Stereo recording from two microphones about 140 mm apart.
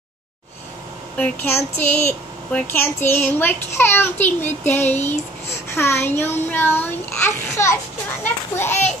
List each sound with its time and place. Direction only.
1.1 s a child's voice: 10° left (ahead or behind)